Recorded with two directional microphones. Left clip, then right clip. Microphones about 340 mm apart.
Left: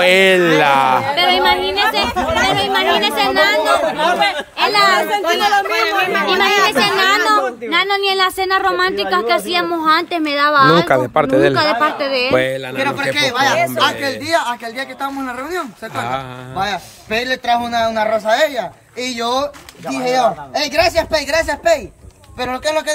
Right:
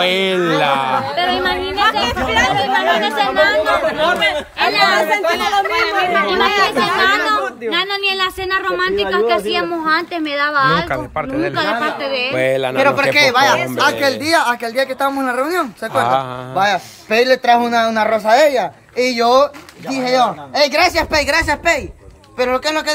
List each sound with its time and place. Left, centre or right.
0.0 s a woman's voice: centre
0.6 s a sound: centre
1.0 s a sound: left
2.5 s chatter: left
4.0 s chatter: centre
5.4 s speech: left
7.2 s a woman's voice: centre
12.4 s speech: centre